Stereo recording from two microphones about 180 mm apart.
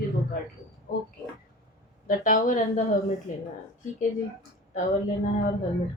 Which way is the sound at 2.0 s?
50° left (ahead or behind).